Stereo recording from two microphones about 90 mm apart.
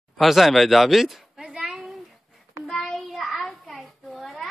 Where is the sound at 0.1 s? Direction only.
Centre (ahead or behind).